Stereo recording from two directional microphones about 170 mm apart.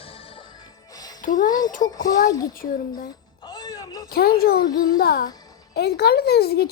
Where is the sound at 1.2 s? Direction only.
50° left (ahead or behind).